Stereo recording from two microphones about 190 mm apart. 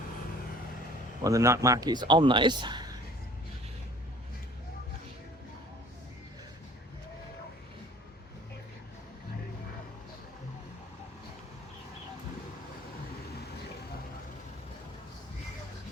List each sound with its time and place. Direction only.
1.2 s speech: 15° right (ahead or behind)